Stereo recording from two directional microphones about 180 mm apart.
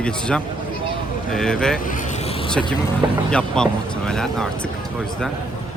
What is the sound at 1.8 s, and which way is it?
Vehicle, 50° left (ahead or behind).